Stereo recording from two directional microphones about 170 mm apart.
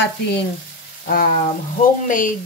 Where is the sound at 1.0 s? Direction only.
60° left (ahead or behind).